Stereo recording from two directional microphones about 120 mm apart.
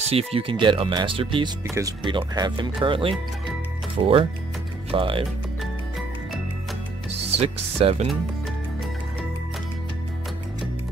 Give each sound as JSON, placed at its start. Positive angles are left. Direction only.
{"t": 0.1, "sound": "speech", "side_deg": -55}
{"t": 1.7, "sound": "speech", "side_deg": -25}
{"t": 2.0, "sound": "speech", "side_deg": -40}
{"t": 7.3, "sound": "speech", "side_deg": -55}